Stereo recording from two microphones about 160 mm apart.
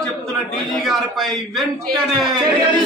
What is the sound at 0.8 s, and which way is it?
A man's voice, centre (ahead or behind).